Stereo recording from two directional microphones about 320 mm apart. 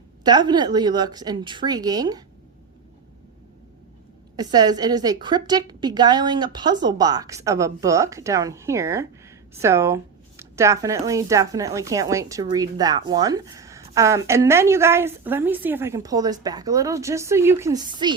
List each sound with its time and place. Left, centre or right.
0.3 s a woman's voice: centre
4.4 s a woman's voice: centre